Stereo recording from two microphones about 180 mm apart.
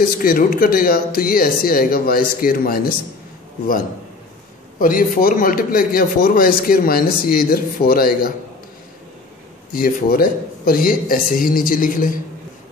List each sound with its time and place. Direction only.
0.0 s a man's voice: 55° left (ahead or behind)
4.7 s a man's voice: 50° left (ahead or behind)
9.7 s a man's voice: 50° left (ahead or behind)